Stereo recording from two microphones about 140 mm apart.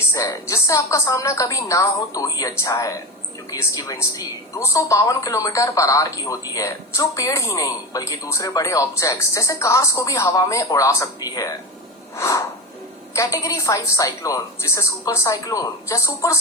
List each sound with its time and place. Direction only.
0.1 s a woman's voice: 20° left (ahead or behind)
12.1 s snort: 20° left (ahead or behind)
13.1 s a woman's voice: 25° left (ahead or behind)